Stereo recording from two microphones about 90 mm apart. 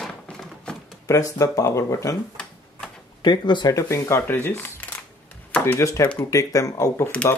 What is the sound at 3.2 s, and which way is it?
Speech, 60° left (ahead or behind).